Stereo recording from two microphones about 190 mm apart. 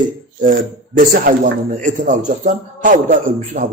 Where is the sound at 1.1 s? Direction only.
45° right (ahead or behind).